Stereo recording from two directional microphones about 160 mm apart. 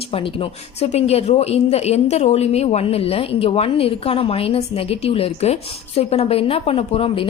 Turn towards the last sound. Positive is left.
turn(degrees=35)  # may be behind; listen again after turning